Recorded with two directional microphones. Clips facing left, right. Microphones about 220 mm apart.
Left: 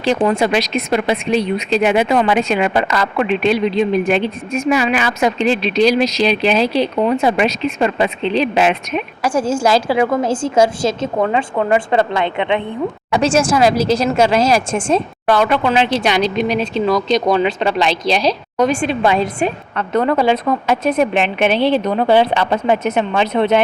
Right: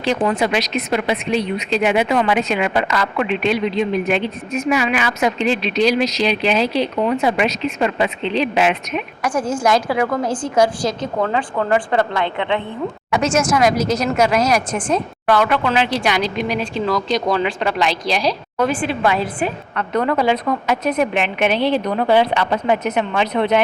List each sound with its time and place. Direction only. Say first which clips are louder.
0.0 s speech: left 3 dB; 30° left (ahead or behind)
13.1 s speech: left 3 dB; 30° left (ahead or behind)